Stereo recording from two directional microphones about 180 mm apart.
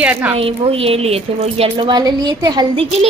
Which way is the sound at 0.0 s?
10° right (ahead or behind).